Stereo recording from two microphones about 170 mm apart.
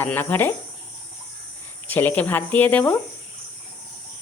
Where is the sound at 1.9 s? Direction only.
10° left (ahead or behind).